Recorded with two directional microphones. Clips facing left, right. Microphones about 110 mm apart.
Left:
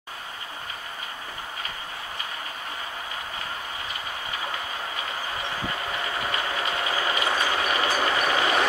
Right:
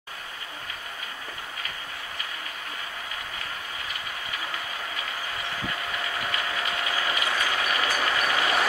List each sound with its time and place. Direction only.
6.3 s train: 30° left (ahead or behind)